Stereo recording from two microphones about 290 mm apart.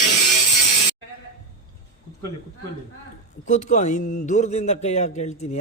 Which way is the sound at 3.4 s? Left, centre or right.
Left.